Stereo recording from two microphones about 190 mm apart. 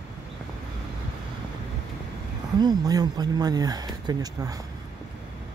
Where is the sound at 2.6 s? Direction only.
20° right (ahead or behind).